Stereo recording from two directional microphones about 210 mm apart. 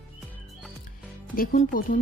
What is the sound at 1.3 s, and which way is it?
Speech, 40° left (ahead or behind).